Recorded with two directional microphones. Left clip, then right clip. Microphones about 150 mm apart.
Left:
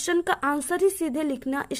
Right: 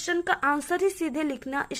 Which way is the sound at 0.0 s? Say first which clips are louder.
Left 1 dB; 50° left (ahead or behind).